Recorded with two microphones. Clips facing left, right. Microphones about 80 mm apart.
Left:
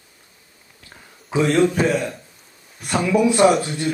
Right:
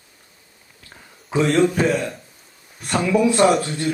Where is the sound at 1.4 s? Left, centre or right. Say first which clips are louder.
Even; centre.